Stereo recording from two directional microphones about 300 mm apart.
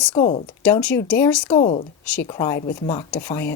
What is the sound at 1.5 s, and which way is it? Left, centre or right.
Speech, centre.